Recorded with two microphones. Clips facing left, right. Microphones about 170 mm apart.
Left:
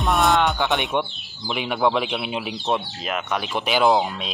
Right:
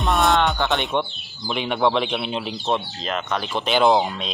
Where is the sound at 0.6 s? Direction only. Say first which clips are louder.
Even; 15° left (ahead or behind).